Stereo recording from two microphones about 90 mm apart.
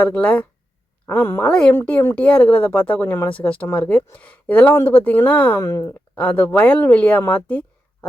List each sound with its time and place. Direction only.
0.0 s speech: 15° left (ahead or behind)
1.5 s speech: 10° left (ahead or behind); by 5.8 s 30° left (ahead or behind)
5.9 s speech: 20° left (ahead or behind)